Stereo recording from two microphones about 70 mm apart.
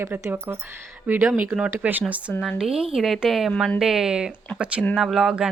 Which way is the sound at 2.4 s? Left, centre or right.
Centre.